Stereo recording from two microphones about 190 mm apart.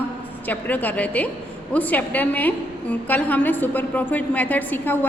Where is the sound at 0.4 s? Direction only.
10° left (ahead or behind).